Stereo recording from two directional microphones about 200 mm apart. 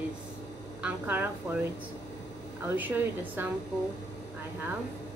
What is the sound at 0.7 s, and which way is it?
Speech, 10° right (ahead or behind).